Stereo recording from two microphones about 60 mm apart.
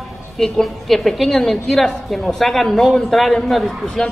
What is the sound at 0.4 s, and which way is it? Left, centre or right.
A woman's voice, centre.